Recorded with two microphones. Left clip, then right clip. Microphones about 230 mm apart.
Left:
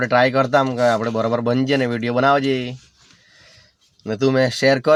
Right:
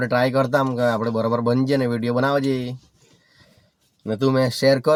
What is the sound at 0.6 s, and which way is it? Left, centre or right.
Speech, right.